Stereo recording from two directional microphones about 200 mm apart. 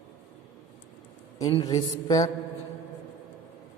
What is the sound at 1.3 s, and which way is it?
Speech, 20° left (ahead or behind).